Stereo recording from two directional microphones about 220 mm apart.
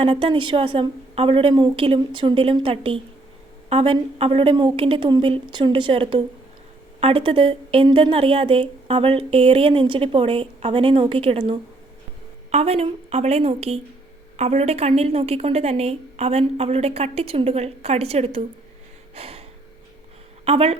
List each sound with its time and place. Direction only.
0.0 s speech: 25° right (ahead or behind)
19.1 s gasp: 25° right (ahead or behind)
20.4 s speech: 25° right (ahead or behind)